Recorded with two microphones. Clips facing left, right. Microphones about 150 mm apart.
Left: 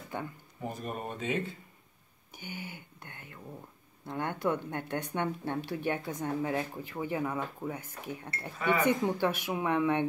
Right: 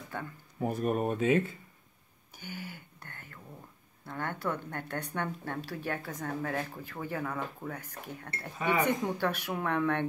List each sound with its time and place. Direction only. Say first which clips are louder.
0.1 s speech: left 2 dB; 20° left (ahead or behind)
0.6 s speech: right 8 dB; 65° right (ahead or behind)
2.4 s speech: even; 20° left (ahead or behind)